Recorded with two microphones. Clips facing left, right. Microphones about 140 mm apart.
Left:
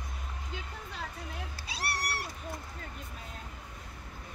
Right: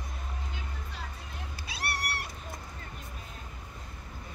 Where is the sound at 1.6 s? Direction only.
35° left (ahead or behind).